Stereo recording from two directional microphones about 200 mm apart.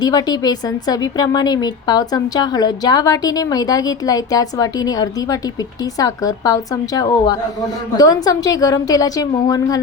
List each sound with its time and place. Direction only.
0.0 s a woman's voice: 20° left (ahead or behind)